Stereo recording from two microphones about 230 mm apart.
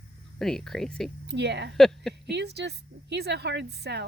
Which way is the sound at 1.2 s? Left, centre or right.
Right.